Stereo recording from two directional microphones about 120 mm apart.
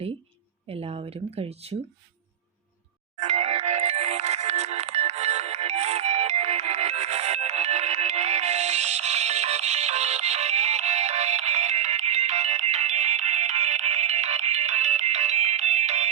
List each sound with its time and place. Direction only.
0.7 s speech: 55° right (ahead or behind)
3.2 s music: 80° right